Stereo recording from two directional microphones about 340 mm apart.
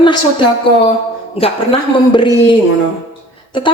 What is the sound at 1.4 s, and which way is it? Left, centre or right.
Speech, centre.